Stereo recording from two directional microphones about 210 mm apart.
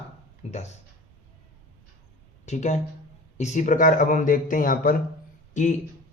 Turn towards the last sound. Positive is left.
turn(degrees=35)  # may be behind; listen again after turning